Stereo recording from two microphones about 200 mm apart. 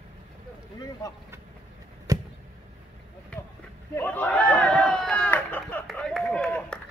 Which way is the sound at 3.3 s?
5° left (ahead or behind).